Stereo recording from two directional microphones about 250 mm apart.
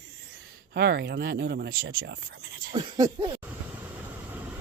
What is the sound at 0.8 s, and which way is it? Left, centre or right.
Speech, right.